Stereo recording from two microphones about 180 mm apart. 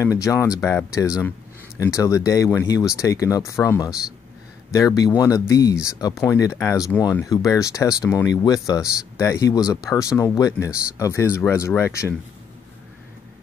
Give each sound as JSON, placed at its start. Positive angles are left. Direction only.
{"t": 0.0, "sound": "speech", "side_deg": 15}